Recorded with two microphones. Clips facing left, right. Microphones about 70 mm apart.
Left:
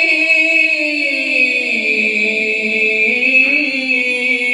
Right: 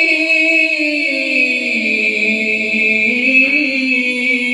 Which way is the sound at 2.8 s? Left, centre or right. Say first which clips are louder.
Even; right.